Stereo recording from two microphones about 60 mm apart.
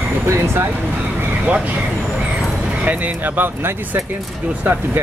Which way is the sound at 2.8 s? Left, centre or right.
Right.